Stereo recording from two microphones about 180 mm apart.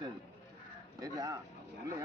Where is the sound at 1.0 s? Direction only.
20° right (ahead or behind).